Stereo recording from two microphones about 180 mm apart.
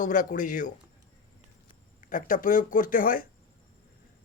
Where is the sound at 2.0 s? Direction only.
50° left (ahead or behind).